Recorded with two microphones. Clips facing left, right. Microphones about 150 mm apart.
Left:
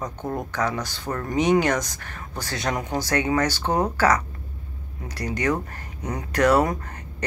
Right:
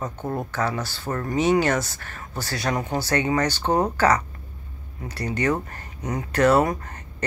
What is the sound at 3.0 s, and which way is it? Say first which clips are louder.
Speech: left 1 dB; 10° left (ahead or behind).